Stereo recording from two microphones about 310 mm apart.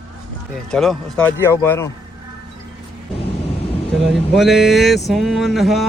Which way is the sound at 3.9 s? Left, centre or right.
Centre.